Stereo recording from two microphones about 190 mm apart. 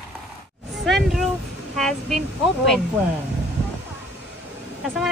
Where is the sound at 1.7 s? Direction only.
Centre (ahead or behind).